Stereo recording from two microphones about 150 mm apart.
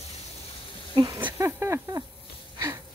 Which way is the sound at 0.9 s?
30° right (ahead or behind).